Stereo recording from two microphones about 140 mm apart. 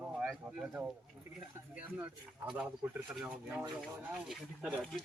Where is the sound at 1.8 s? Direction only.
10° right (ahead or behind).